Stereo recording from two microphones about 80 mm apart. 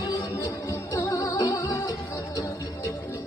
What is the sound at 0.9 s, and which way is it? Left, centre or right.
Music, left.